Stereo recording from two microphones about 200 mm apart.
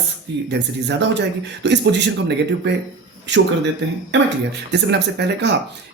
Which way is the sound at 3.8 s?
65° right (ahead or behind).